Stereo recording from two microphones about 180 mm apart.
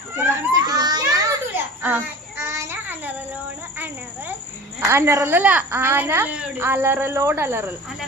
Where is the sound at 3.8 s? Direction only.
10° right (ahead or behind).